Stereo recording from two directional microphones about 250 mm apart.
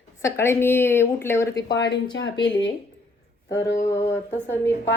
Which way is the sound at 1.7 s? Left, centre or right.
Left.